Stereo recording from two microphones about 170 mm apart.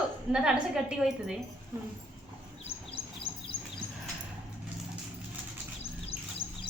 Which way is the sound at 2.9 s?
30° left (ahead or behind).